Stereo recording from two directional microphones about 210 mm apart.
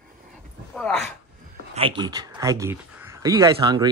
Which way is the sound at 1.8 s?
20° right (ahead or behind).